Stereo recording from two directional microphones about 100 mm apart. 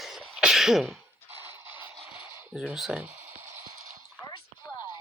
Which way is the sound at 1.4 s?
25° right (ahead or behind).